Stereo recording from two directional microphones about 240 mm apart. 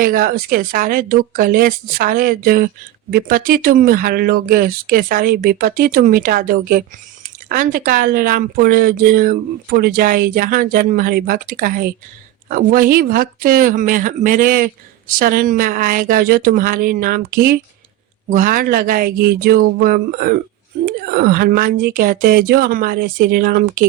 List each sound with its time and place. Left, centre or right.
0.0 s speech: right